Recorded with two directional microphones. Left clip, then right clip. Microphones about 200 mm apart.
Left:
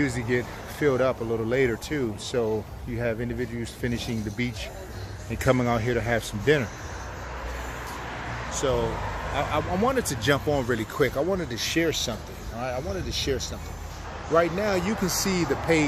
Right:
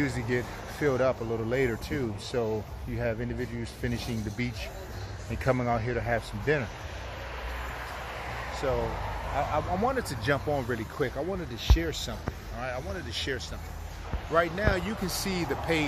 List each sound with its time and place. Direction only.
0.0 s speech: 25° left (ahead or behind)
8.6 s speech: 25° left (ahead or behind); by 11.8 s 45° left (ahead or behind)
11.8 s speech: 20° left (ahead or behind)
12.5 s speech: 10° left (ahead or behind)